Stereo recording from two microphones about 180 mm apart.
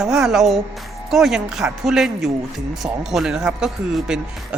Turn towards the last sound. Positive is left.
turn(degrees=0)  # may be behind; listen again after turning